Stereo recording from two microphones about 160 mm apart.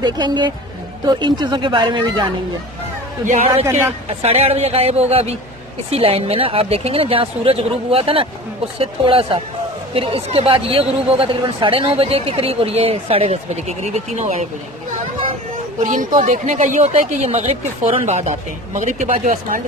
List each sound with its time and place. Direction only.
0.0 s speech: 30° right (ahead or behind)
3.3 s speech: 40° right (ahead or behind)
3.6 s a woman's voice: 15° right (ahead or behind)
4.2 s speech: 40° right (ahead or behind)
15.9 s speech: 55° right (ahead or behind)